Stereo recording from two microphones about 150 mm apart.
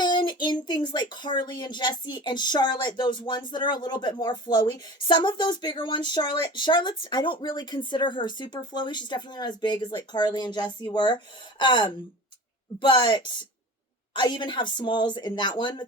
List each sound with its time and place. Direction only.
0.0 s speech: 30° left (ahead or behind)